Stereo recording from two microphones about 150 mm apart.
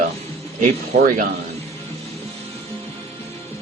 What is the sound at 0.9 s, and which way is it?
Speech, 50° right (ahead or behind).